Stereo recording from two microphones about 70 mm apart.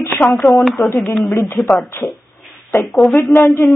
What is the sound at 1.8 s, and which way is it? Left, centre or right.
Speech, left.